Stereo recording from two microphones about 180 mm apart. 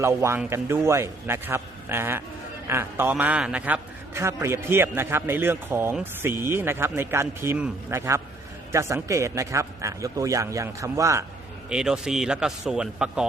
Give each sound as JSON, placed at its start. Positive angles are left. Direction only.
{"t": 0.0, "sound": "a man's voice", "side_deg": -15}
{"t": 11.7, "sound": "a man's voice", "side_deg": -5}